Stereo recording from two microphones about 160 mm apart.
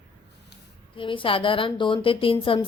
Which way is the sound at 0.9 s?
30° left (ahead or behind).